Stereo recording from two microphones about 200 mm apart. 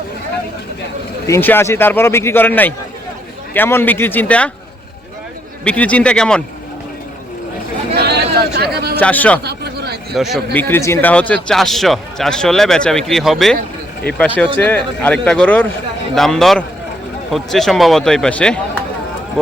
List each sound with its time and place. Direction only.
1.3 s a man's voice: 10° left (ahead or behind)
5.6 s speech: 5° left (ahead or behind)
7.9 s a sound: 55° right (ahead or behind)
9.0 s a man's voice: 10° left (ahead or behind)
9.4 s a sound: 55° right (ahead or behind)
10.2 s a man's voice: centre (ahead or behind)